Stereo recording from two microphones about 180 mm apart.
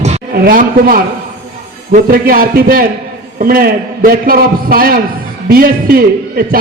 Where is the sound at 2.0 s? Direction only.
55° right (ahead or behind).